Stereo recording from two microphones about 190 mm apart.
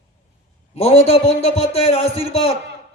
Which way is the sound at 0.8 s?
30° left (ahead or behind).